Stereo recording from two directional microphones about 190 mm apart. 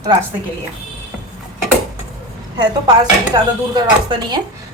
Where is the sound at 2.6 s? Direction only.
20° right (ahead or behind).